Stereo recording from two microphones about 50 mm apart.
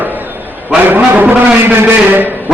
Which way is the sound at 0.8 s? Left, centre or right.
Right.